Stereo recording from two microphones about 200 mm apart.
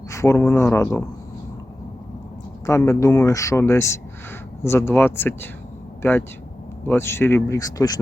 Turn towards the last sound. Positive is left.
turn(degrees=20)  # may be behind; listen again after turning